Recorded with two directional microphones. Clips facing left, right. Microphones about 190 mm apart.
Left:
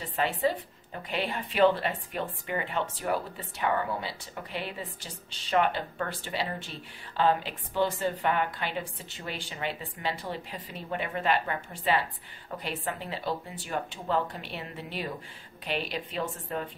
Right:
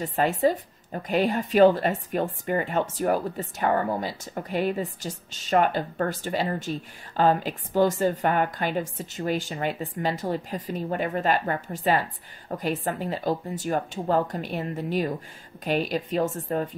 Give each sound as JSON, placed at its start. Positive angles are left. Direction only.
{"t": 0.0, "sound": "speech", "side_deg": -45}